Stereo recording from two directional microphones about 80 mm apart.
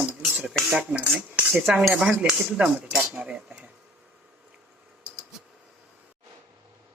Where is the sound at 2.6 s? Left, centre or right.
Right.